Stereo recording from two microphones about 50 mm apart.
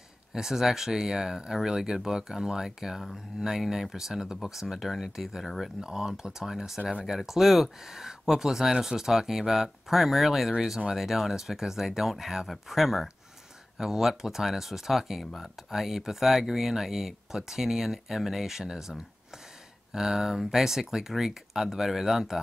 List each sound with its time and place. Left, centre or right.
0.3 s speech: centre
5.8 s speech: centre
6.8 s speech: right
7.1 s speech: centre